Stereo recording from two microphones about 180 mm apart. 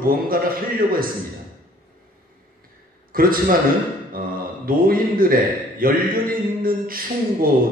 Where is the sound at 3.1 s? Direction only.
50° right (ahead or behind).